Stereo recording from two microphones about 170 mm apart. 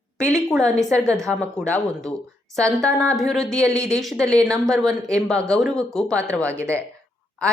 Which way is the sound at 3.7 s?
20° right (ahead or behind).